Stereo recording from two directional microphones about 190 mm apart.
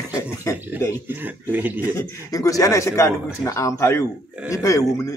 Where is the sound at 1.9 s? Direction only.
15° left (ahead or behind).